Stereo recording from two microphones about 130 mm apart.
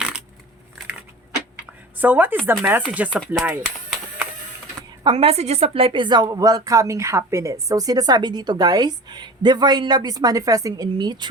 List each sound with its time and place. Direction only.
2.0 s speech: 15° right (ahead or behind)
5.1 s speech: 50° right (ahead or behind); by 11.3 s 35° right (ahead or behind)